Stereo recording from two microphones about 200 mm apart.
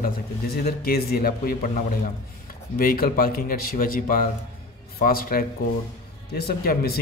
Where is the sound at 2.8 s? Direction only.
45° left (ahead or behind).